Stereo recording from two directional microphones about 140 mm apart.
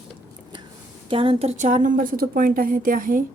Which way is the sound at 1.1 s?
40° right (ahead or behind).